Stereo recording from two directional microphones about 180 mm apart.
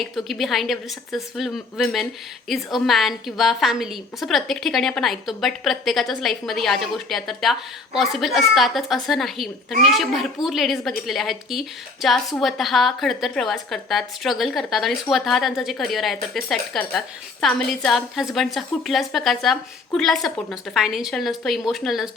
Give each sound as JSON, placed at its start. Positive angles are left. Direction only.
{"t": 0.0, "sound": "a woman's voice", "side_deg": 0}